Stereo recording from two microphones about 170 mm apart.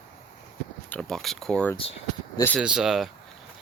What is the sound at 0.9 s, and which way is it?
Speech, 5° left (ahead or behind).